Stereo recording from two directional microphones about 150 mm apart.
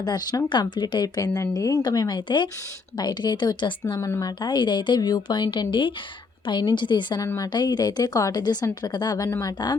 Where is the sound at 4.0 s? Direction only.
20° left (ahead or behind).